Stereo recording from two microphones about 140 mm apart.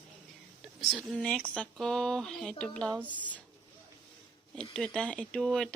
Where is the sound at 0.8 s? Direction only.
Centre (ahead or behind).